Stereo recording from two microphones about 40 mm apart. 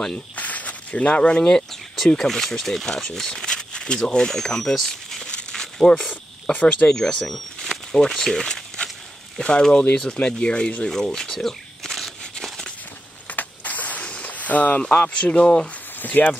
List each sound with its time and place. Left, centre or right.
0.1 s snake: left
1.3 s speech: left
4.7 s crumpling: centre
5.2 s crumpling: centre
5.9 s a sound: left
6.5 s speech: left
6.9 s speech: centre
7.2 s a sound: centre
8.1 s speech: centre
10.9 s a sound: centre
13.3 s a sound: left
15.1 s speech: left
16.0 s speech: left